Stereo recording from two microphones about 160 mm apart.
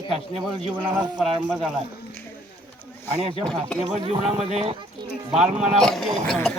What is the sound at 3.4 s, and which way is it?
Speech, 5° left (ahead or behind).